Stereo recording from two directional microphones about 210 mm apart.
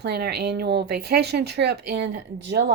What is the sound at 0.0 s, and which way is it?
Speech, 50° right (ahead or behind).